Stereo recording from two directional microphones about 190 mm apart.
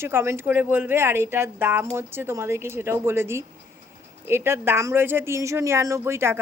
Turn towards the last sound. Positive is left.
turn(degrees=-15)  # may be behind; listen again after turning